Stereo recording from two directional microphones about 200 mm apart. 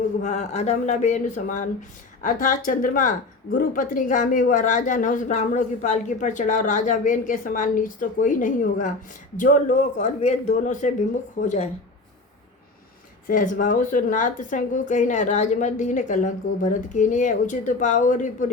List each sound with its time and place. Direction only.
0.2 s a woman's voice: 35° left (ahead or behind)
13.2 s a woman's voice: 40° left (ahead or behind)